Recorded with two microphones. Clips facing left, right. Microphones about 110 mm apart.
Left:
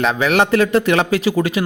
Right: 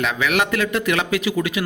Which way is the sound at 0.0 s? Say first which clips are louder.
Left 5 dB; 35° left (ahead or behind).